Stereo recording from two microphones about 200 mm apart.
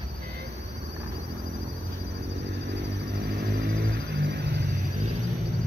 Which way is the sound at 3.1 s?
50° right (ahead or behind).